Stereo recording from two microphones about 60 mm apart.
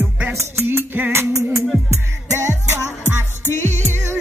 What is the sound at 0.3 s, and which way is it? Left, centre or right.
Music, right.